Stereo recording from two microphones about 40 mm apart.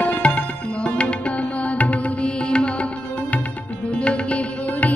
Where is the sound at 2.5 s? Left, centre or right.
Left.